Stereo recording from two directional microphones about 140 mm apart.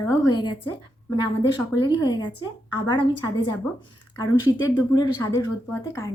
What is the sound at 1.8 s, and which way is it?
A woman's voice, 30° left (ahead or behind).